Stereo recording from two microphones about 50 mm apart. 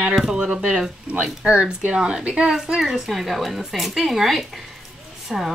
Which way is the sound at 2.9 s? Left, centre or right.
Centre.